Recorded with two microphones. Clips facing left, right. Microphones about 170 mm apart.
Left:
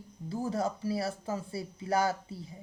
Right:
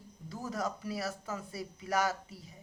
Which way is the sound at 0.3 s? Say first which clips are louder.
Left 5 dB; 30° left (ahead or behind).